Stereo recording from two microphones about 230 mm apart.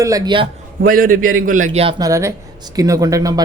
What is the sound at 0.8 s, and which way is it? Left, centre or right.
A man's voice, right.